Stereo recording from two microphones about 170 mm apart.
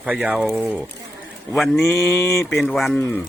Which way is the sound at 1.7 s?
15° left (ahead or behind).